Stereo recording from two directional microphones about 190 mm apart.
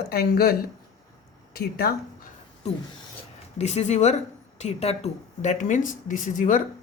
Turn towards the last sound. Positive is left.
turn(degrees=45)  # may be behind; listen again after turning